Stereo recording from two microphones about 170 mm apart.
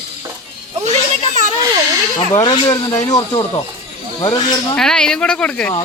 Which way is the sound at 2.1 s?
25° left (ahead or behind).